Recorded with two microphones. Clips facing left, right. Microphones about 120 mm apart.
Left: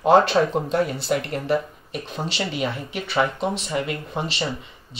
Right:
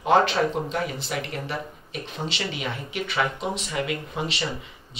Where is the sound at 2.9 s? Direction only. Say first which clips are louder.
Left 2 dB; 35° left (ahead or behind).